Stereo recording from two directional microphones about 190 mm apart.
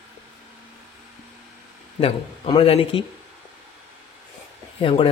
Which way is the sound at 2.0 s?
30° left (ahead or behind).